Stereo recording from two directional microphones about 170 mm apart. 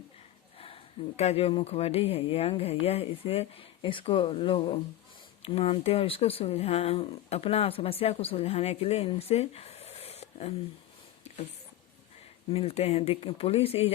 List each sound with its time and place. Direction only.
0.6 s speech: 35° left (ahead or behind)
12.5 s speech: 35° left (ahead or behind)